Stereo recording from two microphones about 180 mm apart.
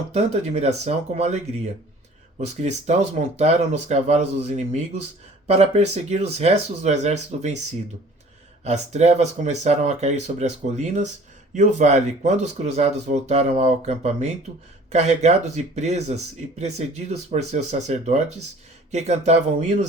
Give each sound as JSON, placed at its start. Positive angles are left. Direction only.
{"t": 0.1, "sound": "speech", "side_deg": -35}
{"t": 8.6, "sound": "speech", "side_deg": -40}